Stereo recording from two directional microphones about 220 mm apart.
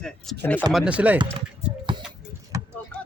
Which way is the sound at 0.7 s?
5° right (ahead or behind).